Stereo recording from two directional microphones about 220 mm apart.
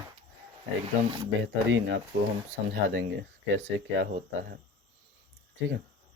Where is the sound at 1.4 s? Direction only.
60° right (ahead or behind).